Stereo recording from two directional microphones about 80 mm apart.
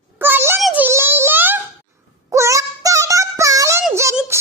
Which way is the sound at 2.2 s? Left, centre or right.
Right.